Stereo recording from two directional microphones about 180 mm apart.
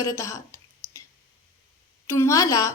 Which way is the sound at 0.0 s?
15° left (ahead or behind).